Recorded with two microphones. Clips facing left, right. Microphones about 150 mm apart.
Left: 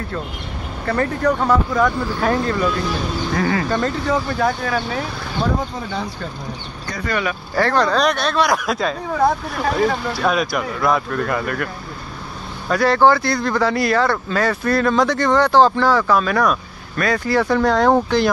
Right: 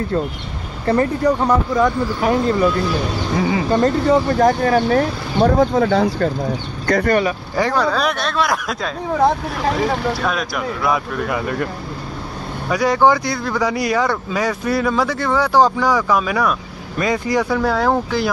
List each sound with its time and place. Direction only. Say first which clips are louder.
1.2 s speech: right 1 dB; 20° right (ahead or behind)
3.7 s speech: right 5 dB; 35° right (ahead or behind); by 5.5 s 50° right (ahead or behind)
5.6 s speech: right 11 dB; 75° right (ahead or behind); by 7.2 s 55° right (ahead or behind)
7.5 s speech: left 2 dB; 10° right (ahead or behind)
11.4 s speech: right 2 dB; 20° right (ahead or behind)
17.6 s speech: left 2 dB; 5° right (ahead or behind)